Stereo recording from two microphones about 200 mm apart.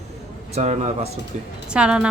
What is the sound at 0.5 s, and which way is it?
Speech, 35° right (ahead or behind).